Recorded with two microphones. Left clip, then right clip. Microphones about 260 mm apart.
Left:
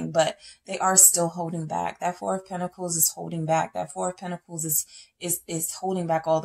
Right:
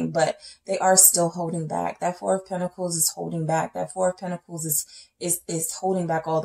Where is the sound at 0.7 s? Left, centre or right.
Left.